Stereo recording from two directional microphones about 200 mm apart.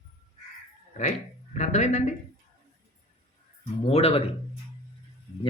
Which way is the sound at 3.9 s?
30° left (ahead or behind).